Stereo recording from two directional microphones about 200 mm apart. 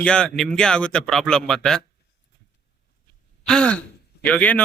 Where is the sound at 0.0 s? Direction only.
5° left (ahead or behind).